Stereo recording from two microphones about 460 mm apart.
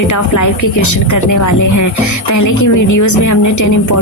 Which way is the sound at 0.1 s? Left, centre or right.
Left.